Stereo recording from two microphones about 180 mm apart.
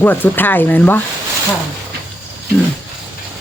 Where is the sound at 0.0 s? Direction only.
10° left (ahead or behind).